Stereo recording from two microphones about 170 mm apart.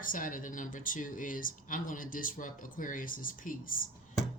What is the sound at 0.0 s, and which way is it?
Speech, 55° left (ahead or behind).